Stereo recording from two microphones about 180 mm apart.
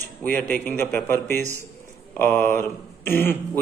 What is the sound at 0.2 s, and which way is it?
Speech, 10° left (ahead or behind).